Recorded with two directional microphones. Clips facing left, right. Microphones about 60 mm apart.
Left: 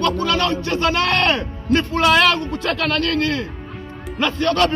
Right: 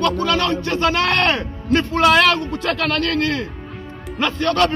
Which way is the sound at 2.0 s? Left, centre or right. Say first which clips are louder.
Right 2 dB; right.